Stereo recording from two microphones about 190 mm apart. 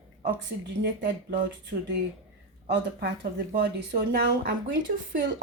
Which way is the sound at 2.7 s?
60° right (ahead or behind).